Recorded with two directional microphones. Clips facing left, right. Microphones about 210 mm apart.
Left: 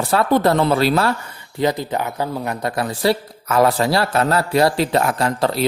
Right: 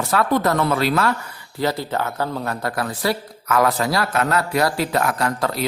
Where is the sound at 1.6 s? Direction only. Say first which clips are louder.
Left 3 dB; 15° left (ahead or behind).